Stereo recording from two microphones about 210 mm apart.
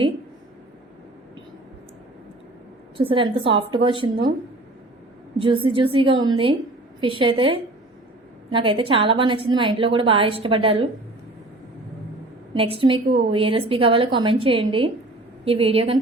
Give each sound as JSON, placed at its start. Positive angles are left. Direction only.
{"t": 3.0, "sound": "a woman's voice", "side_deg": -25}
{"t": 5.4, "sound": "a woman's voice", "side_deg": -25}
{"t": 12.5, "sound": "a woman's voice", "side_deg": -25}